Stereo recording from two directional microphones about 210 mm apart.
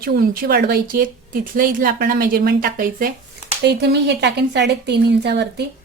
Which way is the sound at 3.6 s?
55° right (ahead or behind).